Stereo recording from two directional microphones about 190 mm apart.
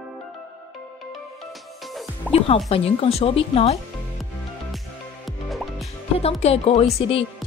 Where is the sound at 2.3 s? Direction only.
30° left (ahead or behind).